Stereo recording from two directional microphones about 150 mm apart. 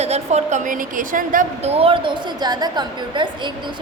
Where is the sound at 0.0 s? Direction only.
45° right (ahead or behind); by 1.5 s 65° right (ahead or behind).